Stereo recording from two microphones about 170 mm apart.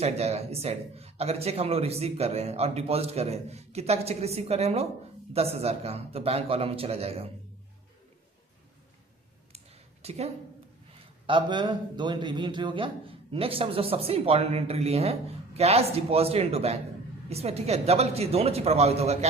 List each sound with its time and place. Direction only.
0.0 s a man's voice: 40° right (ahead or behind)
10.0 s speech: 35° right (ahead or behind)
11.3 s a man's voice: 30° right (ahead or behind)